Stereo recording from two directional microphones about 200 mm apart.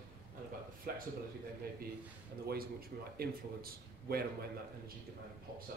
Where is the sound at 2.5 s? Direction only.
50° right (ahead or behind).